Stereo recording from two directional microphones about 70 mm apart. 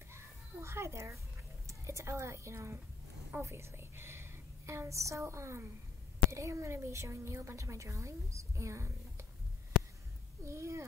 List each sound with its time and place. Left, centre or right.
0.1 s children playing: right
1.7 s a woman's voice: right
9.7 s a sound: centre
10.4 s a woman's voice: right